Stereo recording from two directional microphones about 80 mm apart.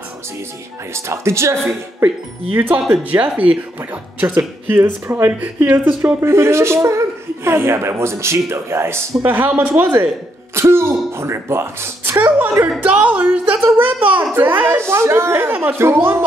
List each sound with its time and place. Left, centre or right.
0.9 s speech: right
2.0 s speech: right
12.2 s speech: right